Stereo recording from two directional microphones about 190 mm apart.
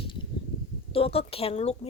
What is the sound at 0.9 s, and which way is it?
Speech, 30° left (ahead or behind).